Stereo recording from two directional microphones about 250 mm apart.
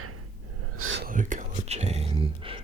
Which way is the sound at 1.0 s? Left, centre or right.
Right.